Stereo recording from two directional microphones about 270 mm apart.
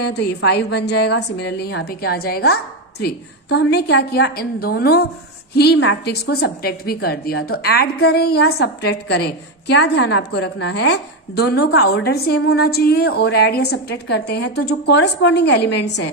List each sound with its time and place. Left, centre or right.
0.0 s a woman's voice: left